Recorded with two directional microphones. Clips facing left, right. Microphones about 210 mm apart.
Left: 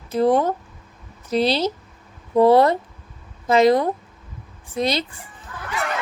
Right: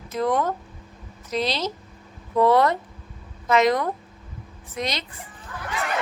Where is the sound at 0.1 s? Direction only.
30° left (ahead or behind).